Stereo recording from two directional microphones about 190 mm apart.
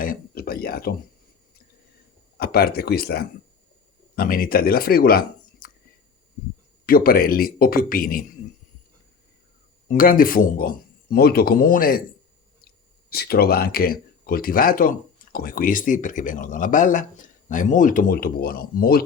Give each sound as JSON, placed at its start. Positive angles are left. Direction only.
{"t": 0.0, "sound": "a sound", "side_deg": 50}
{"t": 2.4, "sound": "speech", "side_deg": 55}
{"t": 6.8, "sound": "speech", "side_deg": 50}
{"t": 9.9, "sound": "speech", "side_deg": 50}